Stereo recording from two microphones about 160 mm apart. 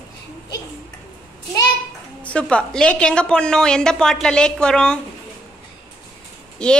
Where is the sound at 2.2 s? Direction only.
5° left (ahead or behind).